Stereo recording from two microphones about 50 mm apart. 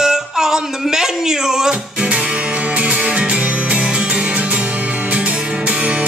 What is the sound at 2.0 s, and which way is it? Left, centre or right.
Music, right.